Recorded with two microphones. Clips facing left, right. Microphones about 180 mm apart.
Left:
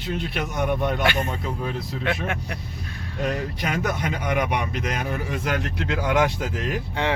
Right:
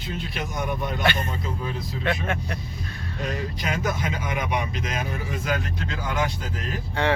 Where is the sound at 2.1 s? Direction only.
5° left (ahead or behind).